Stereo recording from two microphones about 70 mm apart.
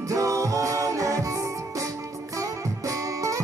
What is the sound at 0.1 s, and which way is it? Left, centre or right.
Music, right.